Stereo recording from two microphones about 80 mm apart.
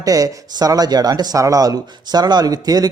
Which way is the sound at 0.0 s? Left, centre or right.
Right.